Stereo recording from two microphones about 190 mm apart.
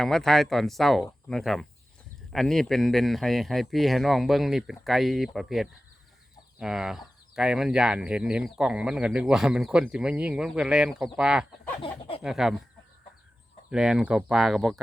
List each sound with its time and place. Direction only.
0.0 s speech: centre (ahead or behind)
11.8 s speech: 30° left (ahead or behind)
12.2 s speech: centre (ahead or behind)
13.7 s speech: 5° right (ahead or behind)